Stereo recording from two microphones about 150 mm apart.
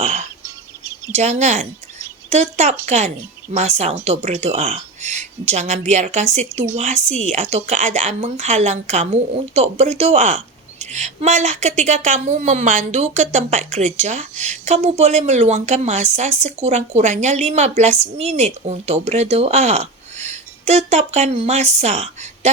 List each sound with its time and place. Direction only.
0.0 s a woman's voice: 50° right (ahead or behind)